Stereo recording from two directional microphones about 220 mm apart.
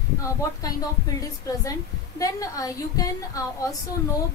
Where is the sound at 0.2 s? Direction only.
15° left (ahead or behind).